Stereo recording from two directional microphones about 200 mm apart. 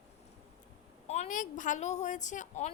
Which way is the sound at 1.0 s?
35° left (ahead or behind).